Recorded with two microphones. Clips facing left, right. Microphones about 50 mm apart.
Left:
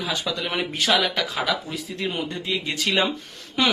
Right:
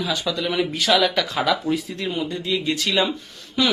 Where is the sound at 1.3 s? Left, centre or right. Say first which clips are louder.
Right 5 dB; centre.